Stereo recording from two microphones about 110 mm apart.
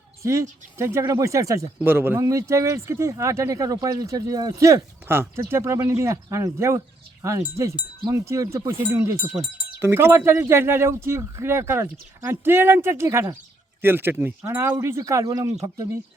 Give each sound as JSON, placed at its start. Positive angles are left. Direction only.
{"t": 0.2, "sound": "speech", "side_deg": -25}